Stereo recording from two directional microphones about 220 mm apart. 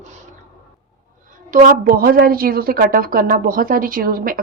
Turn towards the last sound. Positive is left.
turn(degrees=-40)  # may be behind; listen again after turning